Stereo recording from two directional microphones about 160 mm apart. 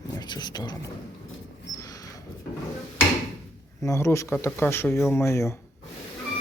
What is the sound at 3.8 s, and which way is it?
Speech, 20° left (ahead or behind).